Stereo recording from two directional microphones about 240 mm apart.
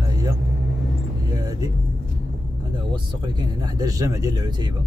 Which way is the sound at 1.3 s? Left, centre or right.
Centre.